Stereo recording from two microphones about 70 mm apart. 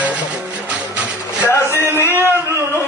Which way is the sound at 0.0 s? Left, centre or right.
Centre.